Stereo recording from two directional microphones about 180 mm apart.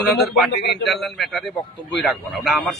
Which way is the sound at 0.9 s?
Centre (ahead or behind).